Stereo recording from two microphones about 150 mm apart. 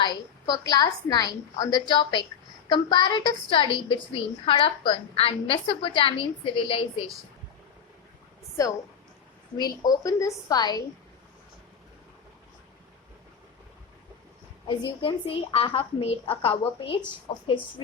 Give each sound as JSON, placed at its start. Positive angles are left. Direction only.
{"t": 0.0, "sound": "a woman's voice", "side_deg": 30}
{"t": 9.6, "sound": "a woman's voice", "side_deg": 25}
{"t": 14.7, "sound": "a woman's voice", "side_deg": 35}